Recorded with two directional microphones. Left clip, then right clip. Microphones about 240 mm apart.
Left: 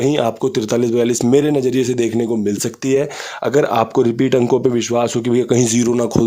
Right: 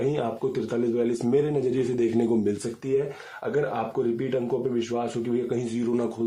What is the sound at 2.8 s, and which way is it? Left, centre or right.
Speech, left.